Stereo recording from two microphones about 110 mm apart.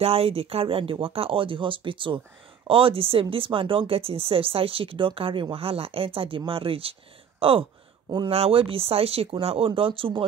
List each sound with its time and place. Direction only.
0.0 s speech: 60° right (ahead or behind)